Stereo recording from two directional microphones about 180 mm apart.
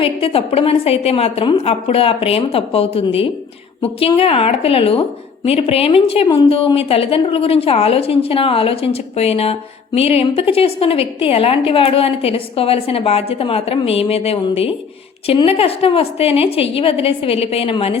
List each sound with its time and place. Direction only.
0.0 s a woman's voice: 30° left (ahead or behind)